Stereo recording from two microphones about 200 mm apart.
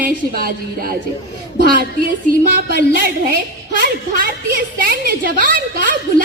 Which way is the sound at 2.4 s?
45° right (ahead or behind).